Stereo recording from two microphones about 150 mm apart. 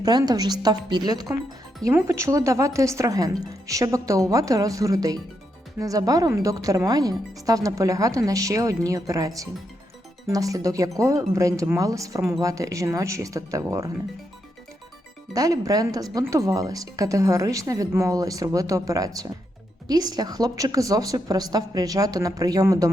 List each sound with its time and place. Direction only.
0.0 s speech: 25° right (ahead or behind)
1.8 s speech: 15° right (ahead or behind)
15.3 s speech: 25° right (ahead or behind)